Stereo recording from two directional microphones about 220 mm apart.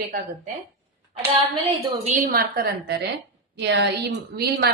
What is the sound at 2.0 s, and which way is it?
A woman's voice, 40° right (ahead or behind).